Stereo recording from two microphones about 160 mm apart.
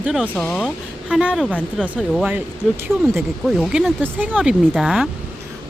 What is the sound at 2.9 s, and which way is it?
Speech, centre (ahead or behind).